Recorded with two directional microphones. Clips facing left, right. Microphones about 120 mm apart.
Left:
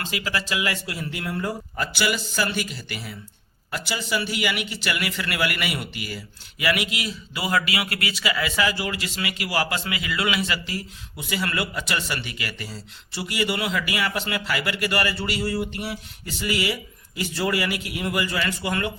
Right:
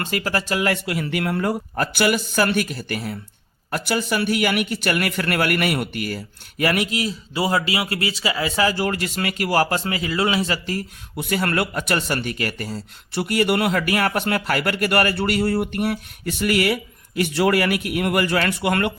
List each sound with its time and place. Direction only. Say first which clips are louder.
0.0 s a man's voice: right 5 dB; 50° right (ahead or behind)
8.7 s a man's voice: right 6 dB; 50° right (ahead or behind); by 18.9 s 65° right (ahead or behind)